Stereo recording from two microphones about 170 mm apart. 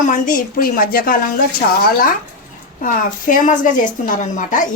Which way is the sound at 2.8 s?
50° left (ahead or behind).